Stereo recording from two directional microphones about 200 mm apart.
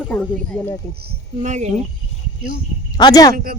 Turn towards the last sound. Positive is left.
turn(degrees=-45)  # may be behind; listen again after turning